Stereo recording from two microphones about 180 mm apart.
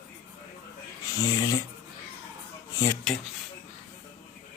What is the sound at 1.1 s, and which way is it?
Speech, 20° left (ahead or behind).